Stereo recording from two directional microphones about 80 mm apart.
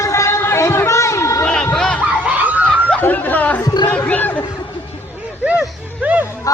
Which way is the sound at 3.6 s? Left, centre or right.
Left.